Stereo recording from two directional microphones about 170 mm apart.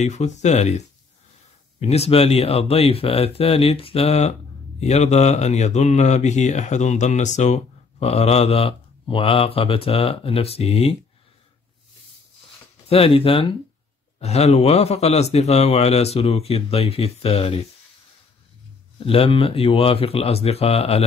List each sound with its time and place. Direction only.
0.0 s speech: 45° left (ahead or behind)
12.8 s speech: 35° left (ahead or behind)
19.0 s speech: 35° left (ahead or behind)